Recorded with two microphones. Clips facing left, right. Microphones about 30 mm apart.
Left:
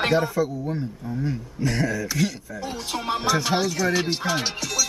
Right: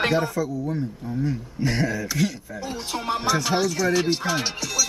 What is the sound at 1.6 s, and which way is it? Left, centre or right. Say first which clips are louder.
Speech: even; centre.